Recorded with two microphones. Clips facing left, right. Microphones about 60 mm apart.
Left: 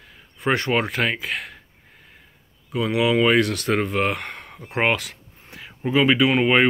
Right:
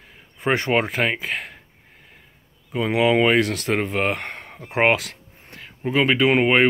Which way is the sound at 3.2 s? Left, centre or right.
Centre.